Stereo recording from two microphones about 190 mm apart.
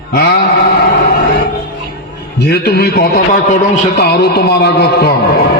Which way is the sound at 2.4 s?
60° left (ahead or behind).